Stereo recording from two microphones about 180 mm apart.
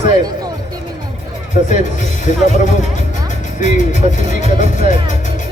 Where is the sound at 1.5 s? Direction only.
45° left (ahead or behind).